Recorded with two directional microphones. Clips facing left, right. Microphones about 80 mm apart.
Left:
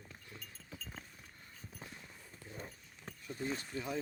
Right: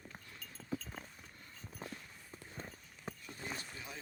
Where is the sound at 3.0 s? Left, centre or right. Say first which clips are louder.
Left 5 dB; centre.